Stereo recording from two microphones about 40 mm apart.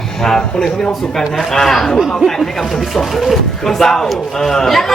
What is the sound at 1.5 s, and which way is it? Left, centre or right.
Speech, centre.